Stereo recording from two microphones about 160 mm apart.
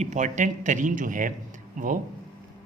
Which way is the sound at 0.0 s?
50° right (ahead or behind).